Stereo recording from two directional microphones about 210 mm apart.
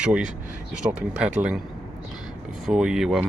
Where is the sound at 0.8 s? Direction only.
15° right (ahead or behind).